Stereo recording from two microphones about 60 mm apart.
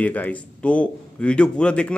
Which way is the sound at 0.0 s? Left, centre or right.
Left.